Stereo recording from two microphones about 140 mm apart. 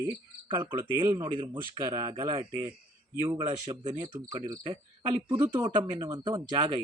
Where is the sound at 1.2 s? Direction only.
35° right (ahead or behind).